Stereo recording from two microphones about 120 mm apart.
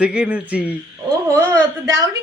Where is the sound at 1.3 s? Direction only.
25° right (ahead or behind).